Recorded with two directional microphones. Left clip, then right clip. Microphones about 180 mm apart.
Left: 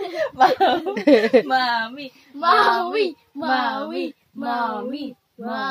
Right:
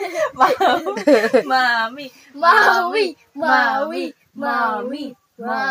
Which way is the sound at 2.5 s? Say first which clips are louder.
Right 3 dB; 45° left (ahead or behind).